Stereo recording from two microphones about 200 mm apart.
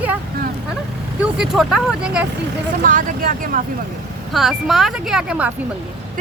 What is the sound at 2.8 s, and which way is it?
Speech, 45° right (ahead or behind).